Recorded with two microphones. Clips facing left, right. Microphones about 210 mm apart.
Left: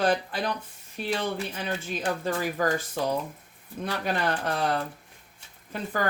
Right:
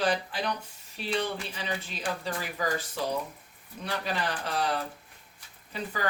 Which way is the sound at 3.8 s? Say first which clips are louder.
Left 4 dB; 50° left (ahead or behind).